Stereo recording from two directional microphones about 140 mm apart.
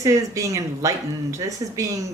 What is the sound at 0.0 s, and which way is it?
A woman's voice, 20° right (ahead or behind).